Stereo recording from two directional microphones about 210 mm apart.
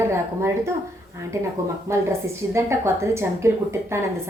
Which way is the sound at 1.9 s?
10° right (ahead or behind).